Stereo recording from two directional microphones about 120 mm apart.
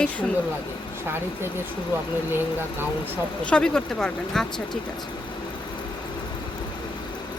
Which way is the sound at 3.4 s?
10° left (ahead or behind).